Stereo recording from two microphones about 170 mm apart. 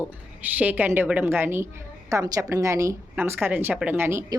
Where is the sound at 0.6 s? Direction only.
10° right (ahead or behind).